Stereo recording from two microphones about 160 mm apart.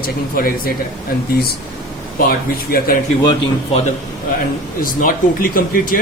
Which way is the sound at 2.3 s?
70° left (ahead or behind).